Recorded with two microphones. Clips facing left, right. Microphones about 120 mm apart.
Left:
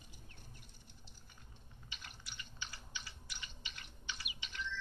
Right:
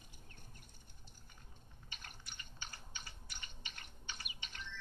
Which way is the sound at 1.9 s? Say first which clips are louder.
Left 1 dB; 50° right (ahead or behind).